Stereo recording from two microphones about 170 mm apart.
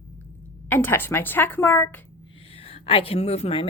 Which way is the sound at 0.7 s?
10° left (ahead or behind).